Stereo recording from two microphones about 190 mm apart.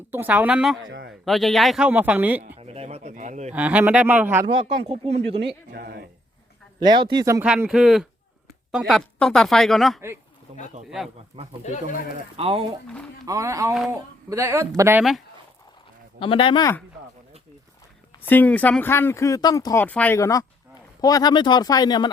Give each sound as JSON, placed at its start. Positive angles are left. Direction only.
{"t": 0.1, "sound": "speech", "side_deg": -10}
{"t": 0.9, "sound": "a sound", "side_deg": -65}
{"t": 1.2, "sound": "speech", "side_deg": 0}
{"t": 2.6, "sound": "a sound", "side_deg": -30}
{"t": 3.5, "sound": "speech", "side_deg": -10}
{"t": 4.4, "sound": "speech", "side_deg": -30}
{"t": 5.4, "sound": "speech", "side_deg": -60}
{"t": 6.7, "sound": "speech", "side_deg": -25}
{"t": 7.4, "sound": "speech", "side_deg": -5}
{"t": 11.6, "sound": "speech", "side_deg": 40}
{"t": 12.4, "sound": "speech", "side_deg": -30}
{"t": 13.2, "sound": "speech", "side_deg": -15}
{"t": 16.2, "sound": "speech", "side_deg": 25}
{"t": 18.3, "sound": "speech", "side_deg": 10}